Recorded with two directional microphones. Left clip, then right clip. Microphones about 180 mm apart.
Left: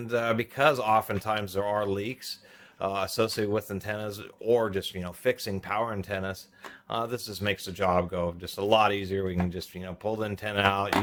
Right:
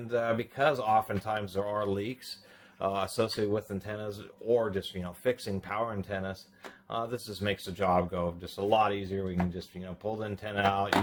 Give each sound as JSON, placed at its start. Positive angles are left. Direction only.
{"t": 0.1, "sound": "speech", "side_deg": 45}
{"t": 8.6, "sound": "speech", "side_deg": 40}